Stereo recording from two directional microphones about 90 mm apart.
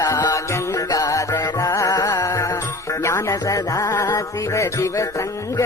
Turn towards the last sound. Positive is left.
turn(degrees=35)  # may be behind; listen again after turning